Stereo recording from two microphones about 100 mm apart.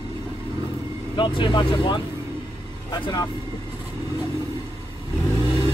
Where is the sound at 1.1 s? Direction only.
55° left (ahead or behind).